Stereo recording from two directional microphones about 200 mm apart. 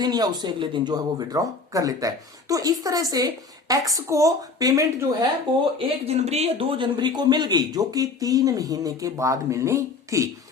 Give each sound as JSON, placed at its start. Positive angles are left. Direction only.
{"t": 0.0, "sound": "speech", "side_deg": -20}
{"t": 6.1, "sound": "speech", "side_deg": -30}